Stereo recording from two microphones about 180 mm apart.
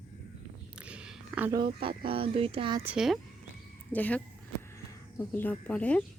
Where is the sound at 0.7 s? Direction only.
5° right (ahead or behind).